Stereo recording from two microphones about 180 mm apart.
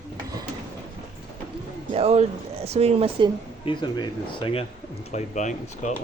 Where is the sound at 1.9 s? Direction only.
35° right (ahead or behind).